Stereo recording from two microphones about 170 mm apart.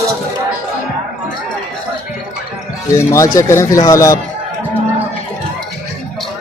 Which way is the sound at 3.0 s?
15° left (ahead or behind).